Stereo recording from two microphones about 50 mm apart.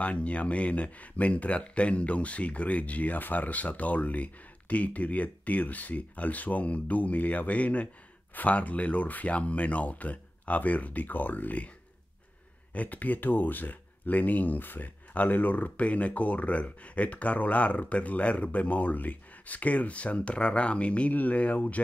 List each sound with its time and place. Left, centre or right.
0.0 s speech: left
12.7 s speech: left